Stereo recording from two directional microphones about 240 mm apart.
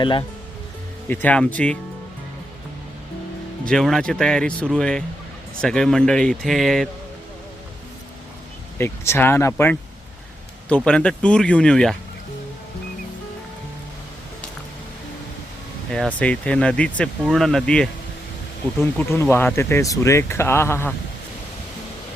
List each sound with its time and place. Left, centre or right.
0.0 s speech: centre
1.0 s speech: centre
3.7 s speech: centre
8.8 s speech: centre
10.8 s speech: centre
15.9 s speech: centre